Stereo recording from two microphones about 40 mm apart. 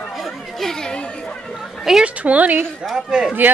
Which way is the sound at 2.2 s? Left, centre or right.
Right.